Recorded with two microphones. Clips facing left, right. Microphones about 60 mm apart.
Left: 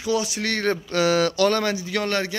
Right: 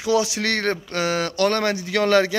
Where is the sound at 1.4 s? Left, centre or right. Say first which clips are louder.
Even; right.